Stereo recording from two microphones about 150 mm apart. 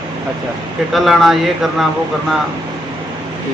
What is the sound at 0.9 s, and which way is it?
Speech, centre (ahead or behind).